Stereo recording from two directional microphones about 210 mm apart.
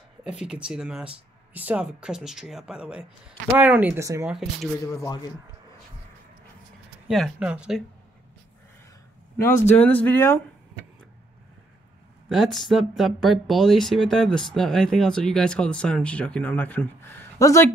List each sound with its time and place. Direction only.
0.2 s speech: 5° right (ahead or behind)
4.9 s speech: 15° left (ahead or behind)
7.1 s speech: centre (ahead or behind)
9.4 s speech: 10° left (ahead or behind)
12.3 s speech: centre (ahead or behind)